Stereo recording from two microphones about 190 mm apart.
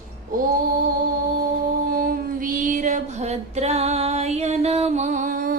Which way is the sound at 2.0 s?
45° right (ahead or behind).